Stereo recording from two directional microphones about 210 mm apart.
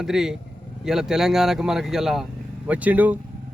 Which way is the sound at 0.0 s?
Centre (ahead or behind).